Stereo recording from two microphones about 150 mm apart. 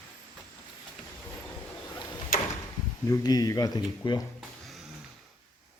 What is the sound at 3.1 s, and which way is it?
Speech, 25° left (ahead or behind).